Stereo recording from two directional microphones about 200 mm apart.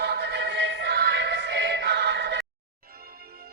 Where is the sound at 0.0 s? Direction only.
55° right (ahead or behind).